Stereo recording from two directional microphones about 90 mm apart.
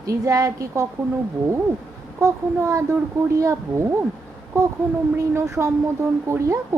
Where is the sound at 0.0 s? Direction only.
40° right (ahead or behind).